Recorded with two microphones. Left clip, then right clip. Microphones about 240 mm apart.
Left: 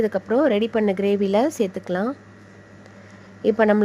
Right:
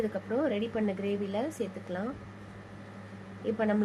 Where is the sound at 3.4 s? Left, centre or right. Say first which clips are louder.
Left 13 dB; left.